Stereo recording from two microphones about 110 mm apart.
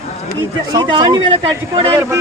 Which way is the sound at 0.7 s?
45° right (ahead or behind).